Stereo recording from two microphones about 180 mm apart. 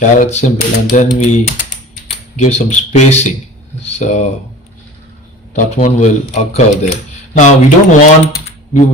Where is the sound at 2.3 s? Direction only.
40° left (ahead or behind).